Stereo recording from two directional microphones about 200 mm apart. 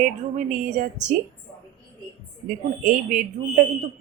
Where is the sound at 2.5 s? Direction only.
40° right (ahead or behind).